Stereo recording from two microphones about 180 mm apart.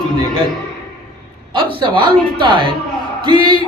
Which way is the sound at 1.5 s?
25° right (ahead or behind).